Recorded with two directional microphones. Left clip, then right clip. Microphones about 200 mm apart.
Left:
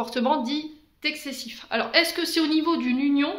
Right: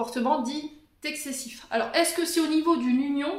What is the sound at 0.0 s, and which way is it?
Speech, 30° left (ahead or behind).